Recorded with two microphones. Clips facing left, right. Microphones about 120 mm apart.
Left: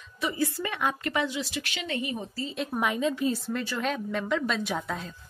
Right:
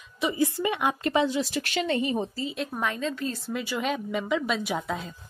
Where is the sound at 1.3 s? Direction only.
45° right (ahead or behind).